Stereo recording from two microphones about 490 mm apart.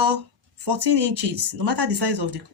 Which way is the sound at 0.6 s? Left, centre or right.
Right.